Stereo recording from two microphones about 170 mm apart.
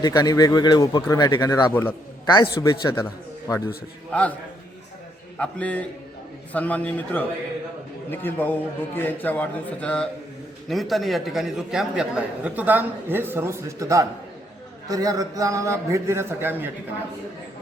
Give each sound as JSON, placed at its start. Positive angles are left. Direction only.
{"t": 0.0, "sound": "speech", "side_deg": 20}
{"t": 1.7, "sound": "a man's voice", "side_deg": 10}
{"t": 2.2, "sound": "speech", "side_deg": 25}
{"t": 4.1, "sound": "a man's voice", "side_deg": 10}
{"t": 5.4, "sound": "a man's voice", "side_deg": 10}